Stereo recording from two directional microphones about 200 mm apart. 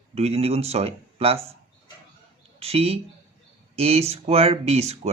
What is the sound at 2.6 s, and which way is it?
Speech, 30° right (ahead or behind).